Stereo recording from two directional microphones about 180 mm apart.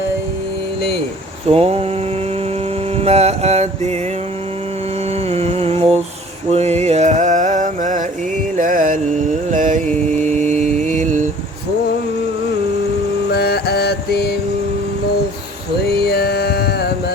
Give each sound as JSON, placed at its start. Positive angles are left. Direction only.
{"t": 0.8, "sound": "vehicle", "side_deg": 65}
{"t": 1.5, "sound": "a sound", "side_deg": -35}
{"t": 3.0, "sound": "mantra", "side_deg": -35}
{"t": 5.3, "sound": "music", "side_deg": -35}
{"t": 6.5, "sound": "a sound", "side_deg": -35}
{"t": 8.5, "sound": "music", "side_deg": -45}
{"t": 9.5, "sound": "mantra", "side_deg": -45}
{"t": 13.3, "sound": "music", "side_deg": 60}
{"t": 16.0, "sound": "music", "side_deg": 60}